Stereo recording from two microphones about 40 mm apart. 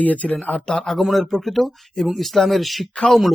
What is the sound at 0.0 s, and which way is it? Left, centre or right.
Speech, left.